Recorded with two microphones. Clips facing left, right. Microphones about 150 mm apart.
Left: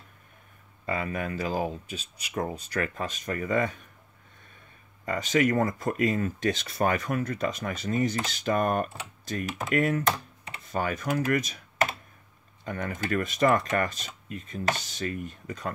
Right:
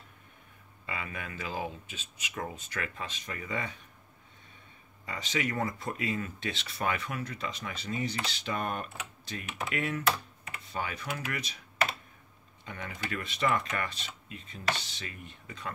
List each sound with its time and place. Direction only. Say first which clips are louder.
0.8 s speech: left 9 dB; 40° left (ahead or behind)
5.0 s speech: left 9 dB; 45° left (ahead or behind)